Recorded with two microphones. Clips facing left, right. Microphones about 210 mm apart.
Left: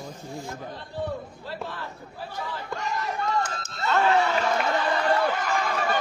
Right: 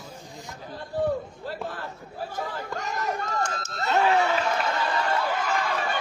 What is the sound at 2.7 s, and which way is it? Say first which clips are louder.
Speech: even; 45° right (ahead or behind).